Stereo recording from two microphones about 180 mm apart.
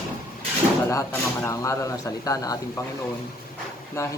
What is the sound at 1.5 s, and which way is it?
A man's voice, 15° left (ahead or behind).